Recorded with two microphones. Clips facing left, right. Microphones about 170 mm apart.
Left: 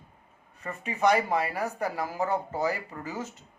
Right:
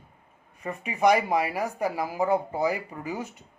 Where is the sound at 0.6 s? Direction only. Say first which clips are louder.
Right 3 dB; 10° right (ahead or behind).